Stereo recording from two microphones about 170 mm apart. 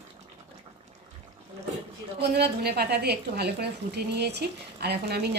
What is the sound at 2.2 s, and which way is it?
A woman's voice, 70° right (ahead or behind).